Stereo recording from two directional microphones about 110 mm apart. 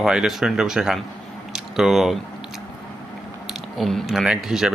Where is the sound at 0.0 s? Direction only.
5° right (ahead or behind).